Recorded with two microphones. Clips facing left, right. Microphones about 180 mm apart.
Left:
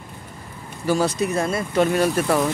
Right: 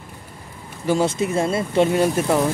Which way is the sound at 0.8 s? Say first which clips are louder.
Right 1 dB; 25° right (ahead or behind).